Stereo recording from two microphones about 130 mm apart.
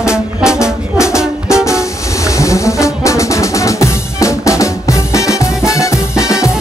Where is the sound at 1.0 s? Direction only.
20° left (ahead or behind).